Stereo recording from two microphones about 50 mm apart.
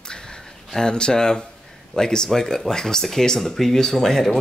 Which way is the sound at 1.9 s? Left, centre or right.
Centre.